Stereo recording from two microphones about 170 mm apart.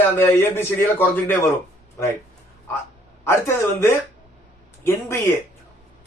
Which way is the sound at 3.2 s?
15° left (ahead or behind).